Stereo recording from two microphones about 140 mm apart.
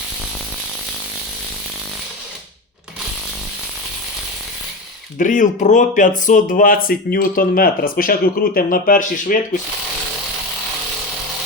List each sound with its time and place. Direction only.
5.1 s speech: 65° left (ahead or behind)